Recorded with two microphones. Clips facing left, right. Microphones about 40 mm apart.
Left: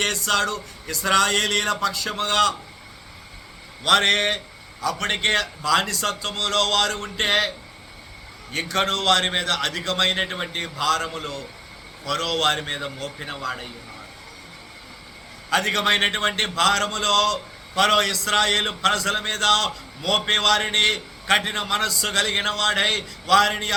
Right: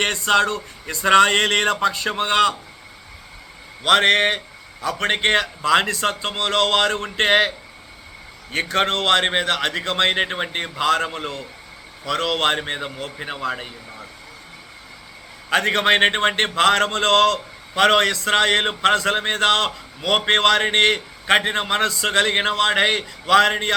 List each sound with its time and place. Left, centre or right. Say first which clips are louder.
0.0 s a man's voice: right 4 dB; right
3.8 s a man's voice: right 3 dB; centre
8.5 s a man's voice: right 3 dB; right
15.4 s a man's voice: right 3 dB; right